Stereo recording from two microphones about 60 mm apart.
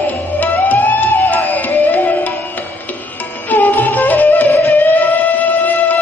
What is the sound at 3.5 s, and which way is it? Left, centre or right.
Music, left.